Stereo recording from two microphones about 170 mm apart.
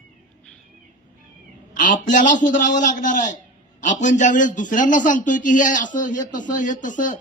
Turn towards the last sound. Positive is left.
turn(degrees=50)  # may be behind; listen again after turning